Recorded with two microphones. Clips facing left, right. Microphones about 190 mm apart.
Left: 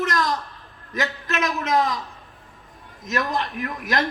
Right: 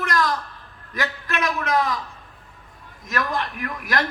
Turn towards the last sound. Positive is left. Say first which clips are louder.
# left 1 dB
turn(degrees=25)  # may be behind; listen again after turning